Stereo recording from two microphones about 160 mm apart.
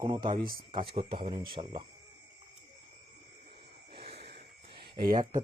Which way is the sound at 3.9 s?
35° right (ahead or behind).